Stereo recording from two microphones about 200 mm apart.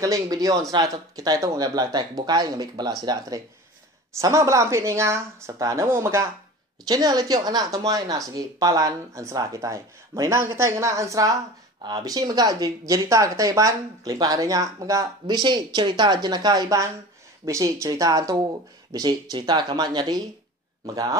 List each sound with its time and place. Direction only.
0.0 s speech: 15° right (ahead or behind)